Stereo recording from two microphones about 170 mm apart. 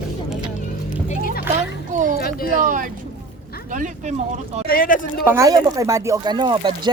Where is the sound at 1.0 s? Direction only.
55° left (ahead or behind).